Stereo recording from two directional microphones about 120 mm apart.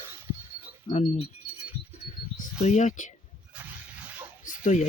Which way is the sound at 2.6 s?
80° left.